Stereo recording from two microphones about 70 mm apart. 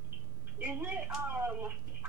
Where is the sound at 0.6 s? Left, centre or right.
Right.